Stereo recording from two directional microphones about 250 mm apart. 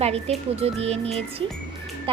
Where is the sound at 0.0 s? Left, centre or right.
Right.